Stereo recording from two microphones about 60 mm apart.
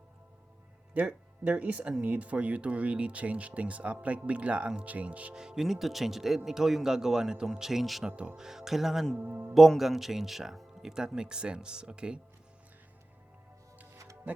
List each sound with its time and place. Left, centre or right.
0.9 s speech: right
5.3 s speech: centre
8.0 s speech: centre
8.4 s speech: centre
9.1 s speech: right
9.6 s speech: centre
13.9 s music: right